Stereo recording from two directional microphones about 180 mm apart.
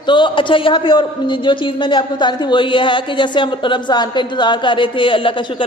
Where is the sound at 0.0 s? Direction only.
25° left (ahead or behind).